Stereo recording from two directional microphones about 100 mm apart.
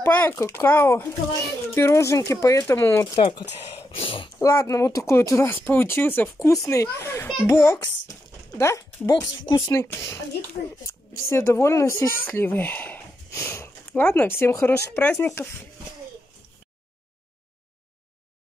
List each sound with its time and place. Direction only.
0.0 s speech: 20° left (ahead or behind)
3.2 s speech: 60° left (ahead or behind)
4.4 s speech: 30° left (ahead or behind)
6.4 s a woman's voice: 30° left (ahead or behind)
9.1 s a woman's voice: 40° left (ahead or behind); by 13.0 s 20° left (ahead or behind)
13.3 s a sound: 30° left (ahead or behind)
13.9 s speech: 20° left (ahead or behind)
15.0 s speech: 15° left (ahead or behind)